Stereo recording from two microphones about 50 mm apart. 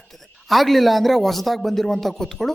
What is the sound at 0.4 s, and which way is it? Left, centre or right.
A woman's voice, centre.